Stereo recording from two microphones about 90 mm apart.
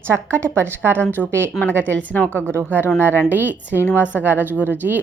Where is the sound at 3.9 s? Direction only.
20° left (ahead or behind).